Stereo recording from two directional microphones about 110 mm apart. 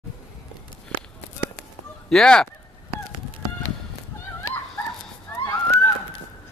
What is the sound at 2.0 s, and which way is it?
Speech, 5° left (ahead or behind).